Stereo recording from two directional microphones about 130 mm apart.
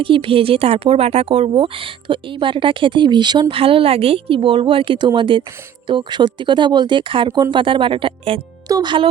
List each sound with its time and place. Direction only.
0.0 s speech: 40° right (ahead or behind)
8.6 s speech: 30° right (ahead or behind)